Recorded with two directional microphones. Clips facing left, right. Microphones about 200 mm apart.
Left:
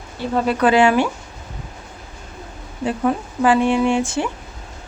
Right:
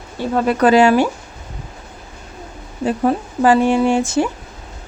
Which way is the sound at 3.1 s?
35° right (ahead or behind).